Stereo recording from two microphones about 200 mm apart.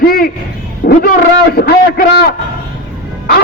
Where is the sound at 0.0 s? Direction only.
50° left (ahead or behind).